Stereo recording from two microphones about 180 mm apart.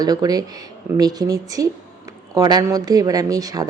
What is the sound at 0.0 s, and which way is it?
A woman's voice, 20° right (ahead or behind).